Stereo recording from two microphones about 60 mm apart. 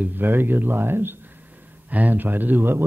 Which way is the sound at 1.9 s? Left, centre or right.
Right.